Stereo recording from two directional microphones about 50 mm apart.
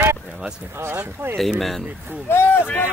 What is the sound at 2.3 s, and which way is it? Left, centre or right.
Speech, left.